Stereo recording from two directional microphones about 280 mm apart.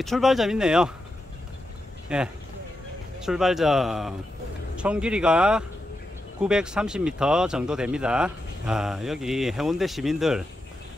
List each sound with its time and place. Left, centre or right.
0.0 s speech: centre
2.0 s speech: centre